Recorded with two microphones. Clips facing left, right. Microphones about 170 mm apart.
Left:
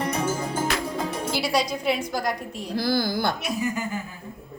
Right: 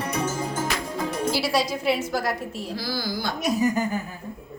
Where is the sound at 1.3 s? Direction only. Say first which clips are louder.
Right 1 dB; centre (ahead or behind).